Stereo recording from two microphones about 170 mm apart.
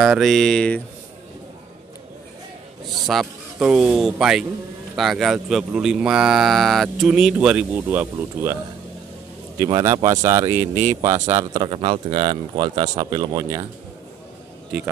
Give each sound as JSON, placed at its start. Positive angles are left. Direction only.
{"t": 0.0, "sound": "speech", "side_deg": 0}
{"t": 3.1, "sound": "speech", "side_deg": 0}
{"t": 9.6, "sound": "speech", "side_deg": -20}
{"t": 11.6, "sound": "speech", "side_deg": -30}